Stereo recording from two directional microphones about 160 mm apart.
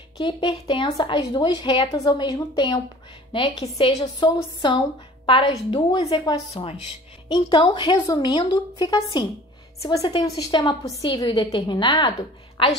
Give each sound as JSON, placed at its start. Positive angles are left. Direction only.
{"t": 0.2, "sound": "a woman's voice", "side_deg": 30}